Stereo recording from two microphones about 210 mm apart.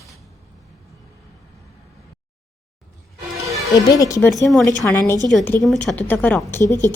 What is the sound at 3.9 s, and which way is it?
A woman's voice, 15° left (ahead or behind).